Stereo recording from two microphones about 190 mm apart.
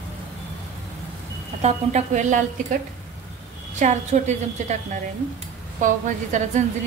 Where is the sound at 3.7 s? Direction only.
40° right (ahead or behind).